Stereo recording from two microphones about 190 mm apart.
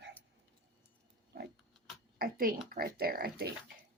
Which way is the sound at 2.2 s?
50° right (ahead or behind).